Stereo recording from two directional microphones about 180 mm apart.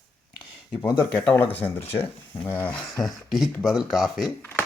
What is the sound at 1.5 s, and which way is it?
Speech, 10° left (ahead or behind).